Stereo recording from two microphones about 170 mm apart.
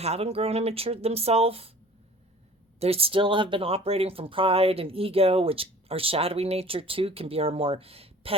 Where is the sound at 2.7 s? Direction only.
35° right (ahead or behind).